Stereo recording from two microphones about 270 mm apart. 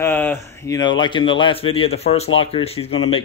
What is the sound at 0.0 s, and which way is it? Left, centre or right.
Speech, centre.